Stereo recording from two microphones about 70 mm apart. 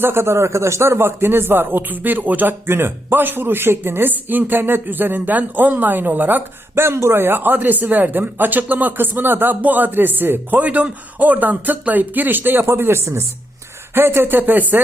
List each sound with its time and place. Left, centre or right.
0.0 s speech: right